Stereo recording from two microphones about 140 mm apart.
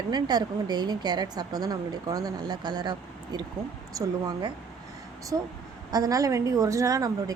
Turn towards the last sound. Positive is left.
turn(degrees=-25)  # may be behind; listen again after turning